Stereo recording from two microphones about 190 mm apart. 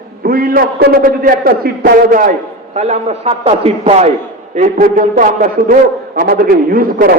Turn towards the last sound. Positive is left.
turn(degrees=-50)  # may be behind; listen again after turning